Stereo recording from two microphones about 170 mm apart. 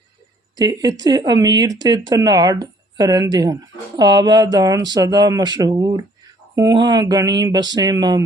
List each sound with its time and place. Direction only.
0.6 s speech: 20° right (ahead or behind)